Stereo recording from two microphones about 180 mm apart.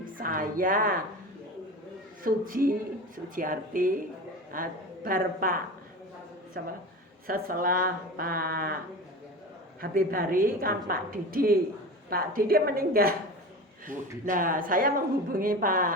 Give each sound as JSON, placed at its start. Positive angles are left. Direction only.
{"t": 0.2, "sound": "speech", "side_deg": -50}
{"t": 2.2, "sound": "a woman's voice", "side_deg": -50}
{"t": 6.5, "sound": "speech", "side_deg": -55}
{"t": 9.8, "sound": "a woman's voice", "side_deg": -55}